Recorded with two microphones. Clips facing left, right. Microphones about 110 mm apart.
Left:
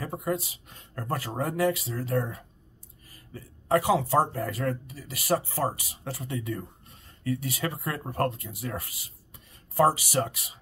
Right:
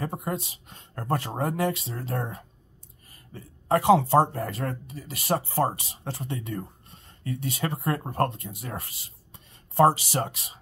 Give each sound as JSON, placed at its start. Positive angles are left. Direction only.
{"t": 0.0, "sound": "a man's voice", "side_deg": -30}